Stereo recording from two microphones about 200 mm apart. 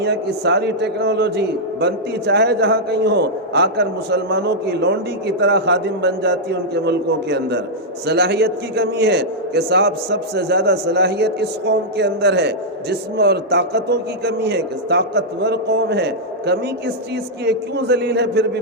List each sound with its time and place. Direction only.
0.0 s a man's voice: 55° right (ahead or behind)